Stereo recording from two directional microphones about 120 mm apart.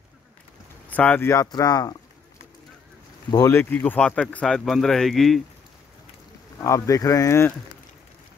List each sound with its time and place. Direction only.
0.8 s speech: 15° left (ahead or behind)
1.3 s speech: 30° left (ahead or behind)
3.4 s speech: 20° left (ahead or behind); by 5.4 s centre (ahead or behind)
6.6 s speech: 25° left (ahead or behind)